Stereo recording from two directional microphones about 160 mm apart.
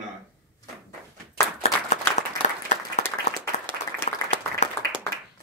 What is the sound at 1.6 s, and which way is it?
Clapping, 45° left (ahead or behind).